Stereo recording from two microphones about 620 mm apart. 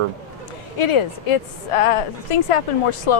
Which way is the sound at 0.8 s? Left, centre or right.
Left.